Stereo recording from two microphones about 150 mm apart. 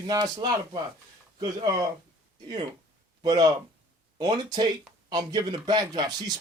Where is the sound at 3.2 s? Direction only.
25° right (ahead or behind).